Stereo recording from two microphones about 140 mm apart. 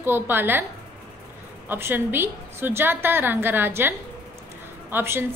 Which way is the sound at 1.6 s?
15° right (ahead or behind).